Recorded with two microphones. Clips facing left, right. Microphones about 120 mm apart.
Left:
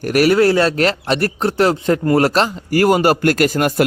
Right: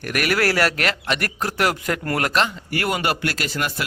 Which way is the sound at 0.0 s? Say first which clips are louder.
Left 9 dB; 35° left (ahead or behind).